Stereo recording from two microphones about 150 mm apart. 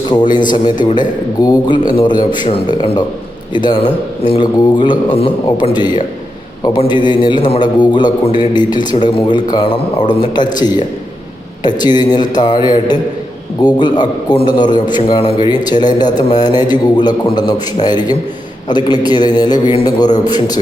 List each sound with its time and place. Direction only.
0.3 s a man's voice: 30° left (ahead or behind)